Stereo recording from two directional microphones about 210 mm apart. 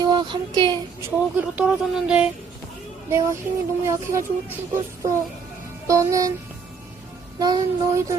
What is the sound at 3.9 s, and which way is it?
Speech, 15° right (ahead or behind).